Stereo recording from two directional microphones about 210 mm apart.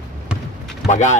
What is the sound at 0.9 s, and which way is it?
Speech, 35° left (ahead or behind).